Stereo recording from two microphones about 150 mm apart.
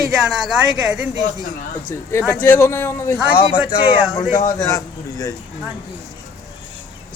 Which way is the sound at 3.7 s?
35° left (ahead or behind).